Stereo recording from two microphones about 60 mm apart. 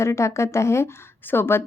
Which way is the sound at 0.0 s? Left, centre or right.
Left.